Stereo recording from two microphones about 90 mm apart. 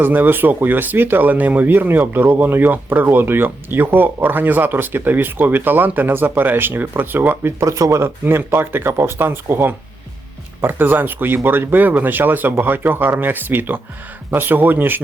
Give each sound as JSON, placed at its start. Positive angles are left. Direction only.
{"t": 0.0, "sound": "speech", "side_deg": -20}
{"t": 7.6, "sound": "speech", "side_deg": -35}